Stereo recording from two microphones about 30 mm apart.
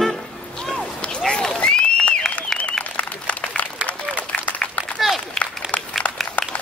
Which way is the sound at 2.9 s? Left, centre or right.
Left.